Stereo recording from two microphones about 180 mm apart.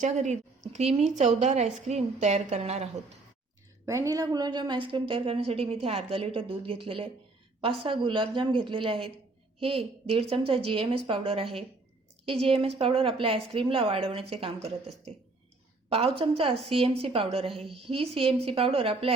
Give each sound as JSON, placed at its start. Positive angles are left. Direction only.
{"t": 0.0, "sound": "a woman's voice", "side_deg": -40}
{"t": 3.8, "sound": "a woman's voice", "side_deg": -15}